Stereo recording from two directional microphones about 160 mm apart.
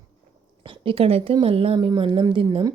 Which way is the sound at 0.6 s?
35° right (ahead or behind).